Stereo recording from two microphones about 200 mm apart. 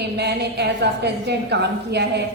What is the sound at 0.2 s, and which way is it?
A woman's voice, 55° right (ahead or behind).